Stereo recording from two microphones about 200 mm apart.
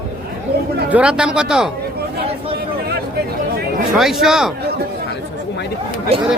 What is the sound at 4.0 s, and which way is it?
Speech, centre (ahead or behind).